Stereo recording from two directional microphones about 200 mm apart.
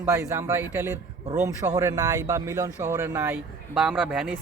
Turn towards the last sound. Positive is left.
turn(degrees=-5)  # may be behind; listen again after turning